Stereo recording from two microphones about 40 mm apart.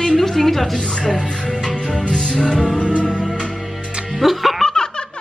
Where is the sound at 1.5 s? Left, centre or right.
Centre.